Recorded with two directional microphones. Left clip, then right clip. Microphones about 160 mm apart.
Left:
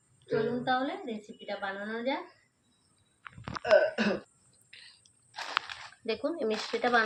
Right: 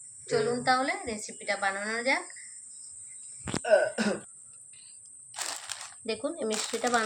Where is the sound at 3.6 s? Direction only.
65° right (ahead or behind).